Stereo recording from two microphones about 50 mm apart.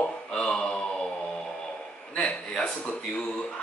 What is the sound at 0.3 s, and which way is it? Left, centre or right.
Mantra, centre.